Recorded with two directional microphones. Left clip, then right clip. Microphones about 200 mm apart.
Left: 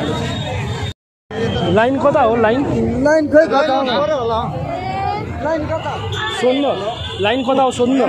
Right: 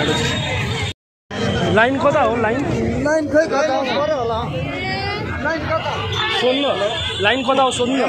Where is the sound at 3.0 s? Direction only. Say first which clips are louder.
Left 5 dB; 20° left (ahead or behind).